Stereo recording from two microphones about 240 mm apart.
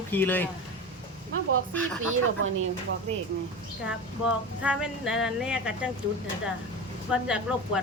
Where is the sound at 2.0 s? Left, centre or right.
Right.